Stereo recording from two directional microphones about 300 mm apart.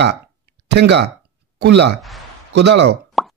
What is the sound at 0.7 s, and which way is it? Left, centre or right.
Speech, right.